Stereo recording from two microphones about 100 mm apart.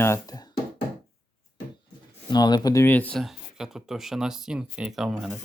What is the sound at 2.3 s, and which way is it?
Speech, 45° left (ahead or behind).